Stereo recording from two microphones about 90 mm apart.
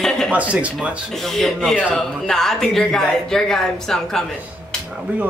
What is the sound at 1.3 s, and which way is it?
A woman's voice, centre (ahead or behind).